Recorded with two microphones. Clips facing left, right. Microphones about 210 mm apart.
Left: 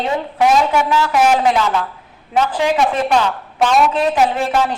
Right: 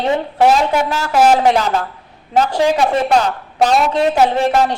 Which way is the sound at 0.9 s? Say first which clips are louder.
Right 3 dB; 40° right (ahead or behind).